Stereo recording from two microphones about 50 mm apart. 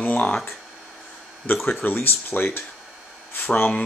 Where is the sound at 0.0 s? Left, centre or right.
Left.